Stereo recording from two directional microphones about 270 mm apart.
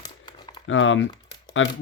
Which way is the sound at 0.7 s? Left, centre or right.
Left.